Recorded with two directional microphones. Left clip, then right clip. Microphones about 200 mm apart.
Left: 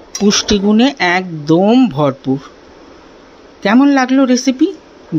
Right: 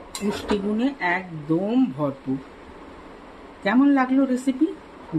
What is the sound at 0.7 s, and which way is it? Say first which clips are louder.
Speech: left 13 dB; 45° left (ahead or behind).